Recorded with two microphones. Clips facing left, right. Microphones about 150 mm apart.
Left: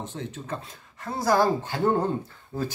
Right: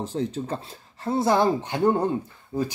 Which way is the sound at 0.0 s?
35° right (ahead or behind).